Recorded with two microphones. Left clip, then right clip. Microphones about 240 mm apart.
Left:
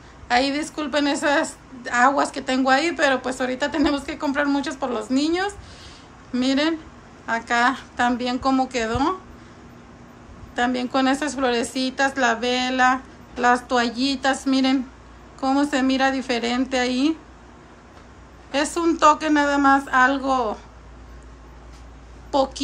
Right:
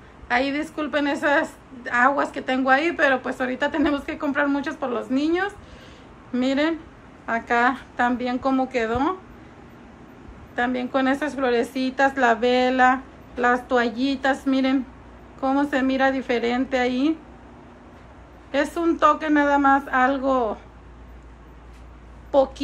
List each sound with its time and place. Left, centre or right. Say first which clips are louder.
0.3 s a woman's voice: left 2 dB; centre
10.5 s a woman's voice: left 1 dB; centre
18.5 s a woman's voice: left 1 dB; centre
22.3 s a woman's voice: right 2 dB; centre